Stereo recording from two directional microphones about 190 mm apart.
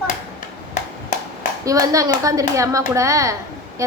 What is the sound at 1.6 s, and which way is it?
A woman's voice, 15° right (ahead or behind).